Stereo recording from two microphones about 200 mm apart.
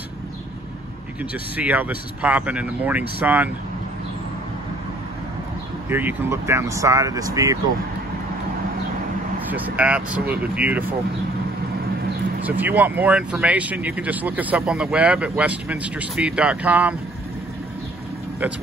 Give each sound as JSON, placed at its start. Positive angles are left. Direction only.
{"t": 1.6, "sound": "speech", "side_deg": -5}
{"t": 5.9, "sound": "speech", "side_deg": -10}
{"t": 9.5, "sound": "speech", "side_deg": -5}
{"t": 12.4, "sound": "speech", "side_deg": -10}